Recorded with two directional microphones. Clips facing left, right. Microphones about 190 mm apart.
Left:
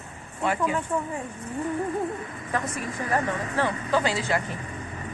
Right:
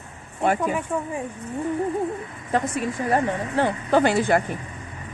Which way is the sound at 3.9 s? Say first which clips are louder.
Right 7 dB; 55° right (ahead or behind).